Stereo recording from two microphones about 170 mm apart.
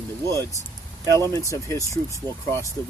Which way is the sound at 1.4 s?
20° left (ahead or behind).